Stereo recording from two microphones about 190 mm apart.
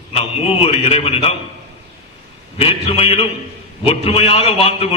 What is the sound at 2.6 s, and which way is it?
A man's voice, 30° left (ahead or behind).